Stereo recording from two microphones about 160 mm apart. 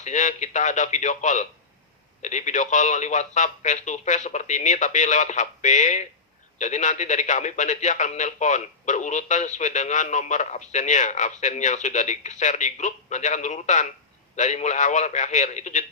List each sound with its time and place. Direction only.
0.0 s a man's voice: 50° left (ahead or behind)